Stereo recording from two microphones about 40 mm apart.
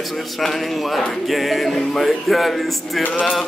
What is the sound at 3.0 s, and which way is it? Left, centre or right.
Music, left.